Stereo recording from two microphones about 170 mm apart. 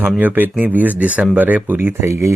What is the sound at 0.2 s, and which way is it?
Speech, 10° right (ahead or behind).